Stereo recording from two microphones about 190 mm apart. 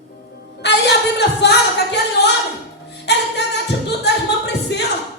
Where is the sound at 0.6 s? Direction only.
65° left (ahead or behind).